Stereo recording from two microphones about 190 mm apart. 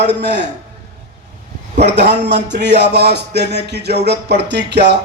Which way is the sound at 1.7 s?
40° right (ahead or behind).